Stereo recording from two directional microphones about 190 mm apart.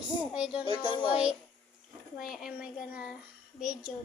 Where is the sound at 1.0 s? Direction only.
5° right (ahead or behind).